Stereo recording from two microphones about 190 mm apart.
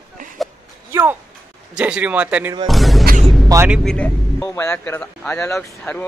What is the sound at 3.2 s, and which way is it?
Music, centre (ahead or behind).